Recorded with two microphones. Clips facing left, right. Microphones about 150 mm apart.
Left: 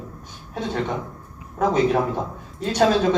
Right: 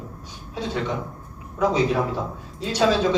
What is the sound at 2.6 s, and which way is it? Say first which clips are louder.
Speech: left 4 dB; 50° left (ahead or behind).